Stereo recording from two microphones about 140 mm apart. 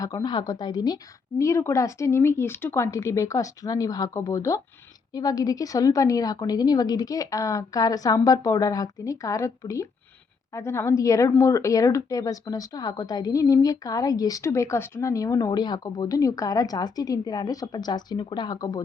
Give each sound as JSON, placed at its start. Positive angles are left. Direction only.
{"t": 0.0, "sound": "speech", "side_deg": 25}